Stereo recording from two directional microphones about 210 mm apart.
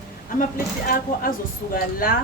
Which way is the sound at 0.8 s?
40° left (ahead or behind).